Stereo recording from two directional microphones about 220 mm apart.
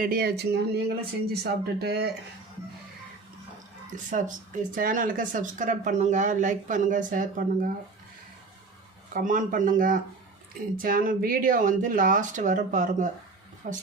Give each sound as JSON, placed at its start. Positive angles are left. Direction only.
{"t": 0.0, "sound": "speech", "side_deg": -45}
{"t": 4.1, "sound": "speech", "side_deg": -35}
{"t": 9.1, "sound": "speech", "side_deg": -40}